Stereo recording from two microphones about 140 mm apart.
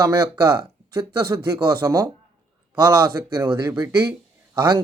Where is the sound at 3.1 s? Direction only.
20° right (ahead or behind).